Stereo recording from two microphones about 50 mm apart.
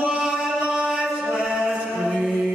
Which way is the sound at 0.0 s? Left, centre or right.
Centre.